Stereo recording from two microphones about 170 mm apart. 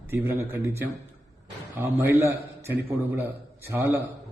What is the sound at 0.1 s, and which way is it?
A man's voice, 15° right (ahead or behind).